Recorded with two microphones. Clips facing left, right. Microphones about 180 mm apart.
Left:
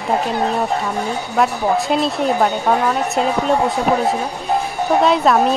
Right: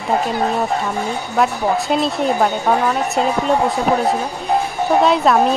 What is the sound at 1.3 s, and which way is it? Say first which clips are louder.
Speech: even; centre (ahead or behind).